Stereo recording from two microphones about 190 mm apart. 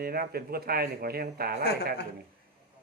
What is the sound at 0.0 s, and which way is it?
Speech, 55° right (ahead or behind).